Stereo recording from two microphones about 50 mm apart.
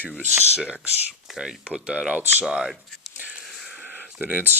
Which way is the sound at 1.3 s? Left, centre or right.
Centre.